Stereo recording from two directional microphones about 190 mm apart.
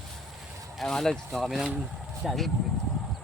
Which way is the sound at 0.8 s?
Centre (ahead or behind).